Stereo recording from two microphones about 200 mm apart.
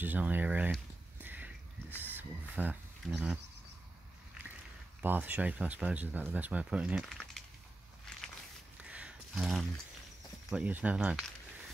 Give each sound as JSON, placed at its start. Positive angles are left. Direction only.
{"t": 0.0, "sound": "speech", "side_deg": -10}
{"t": 1.2, "sound": "a sound", "side_deg": -10}
{"t": 2.0, "sound": "speech", "side_deg": -10}
{"t": 5.0, "sound": "speech", "side_deg": -10}
{"t": 8.8, "sound": "a sound", "side_deg": -5}
{"t": 10.5, "sound": "speech", "side_deg": -5}